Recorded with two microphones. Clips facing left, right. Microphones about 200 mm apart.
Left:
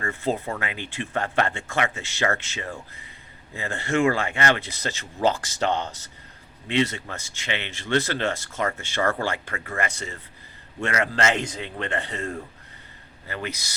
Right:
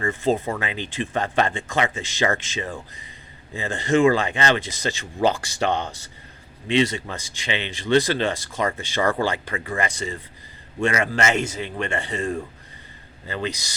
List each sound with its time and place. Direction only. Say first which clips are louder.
0.0 s speech: right 5 dB; 15° right (ahead or behind)
6.7 s speech: right 3 dB; 15° right (ahead or behind)
11.3 s speech: right 4 dB; 70° right (ahead or behind)
11.8 s speech: right 3 dB; 10° right (ahead or behind)